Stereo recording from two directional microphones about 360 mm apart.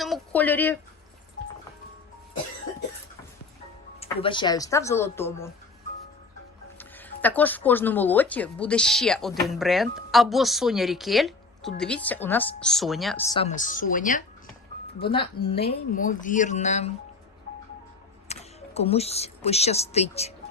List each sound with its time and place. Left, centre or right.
0.0 s speech: centre
4.0 s speech: centre
6.7 s speech: centre
18.3 s speech: centre